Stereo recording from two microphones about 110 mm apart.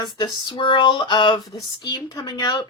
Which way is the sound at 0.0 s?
45° left (ahead or behind).